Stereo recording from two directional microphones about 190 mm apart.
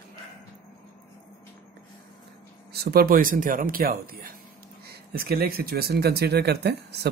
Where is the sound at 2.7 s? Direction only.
55° right (ahead or behind).